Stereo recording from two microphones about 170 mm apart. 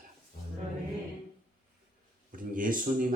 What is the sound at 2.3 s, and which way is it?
Speech, 50° right (ahead or behind).